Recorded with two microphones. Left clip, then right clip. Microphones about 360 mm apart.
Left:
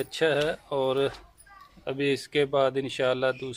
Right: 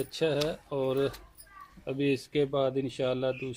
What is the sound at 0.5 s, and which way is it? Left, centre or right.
Speech, left.